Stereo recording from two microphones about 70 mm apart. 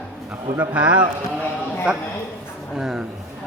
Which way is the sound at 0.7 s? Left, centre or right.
Centre.